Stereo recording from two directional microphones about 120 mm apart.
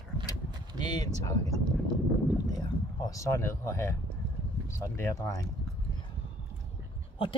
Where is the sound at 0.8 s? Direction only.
35° left (ahead or behind).